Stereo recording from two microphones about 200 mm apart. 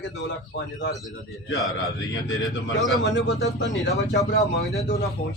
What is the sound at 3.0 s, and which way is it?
Speech, 60° left (ahead or behind).